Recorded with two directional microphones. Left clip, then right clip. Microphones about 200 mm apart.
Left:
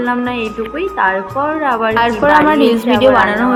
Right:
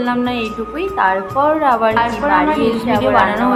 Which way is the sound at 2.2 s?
40° left (ahead or behind).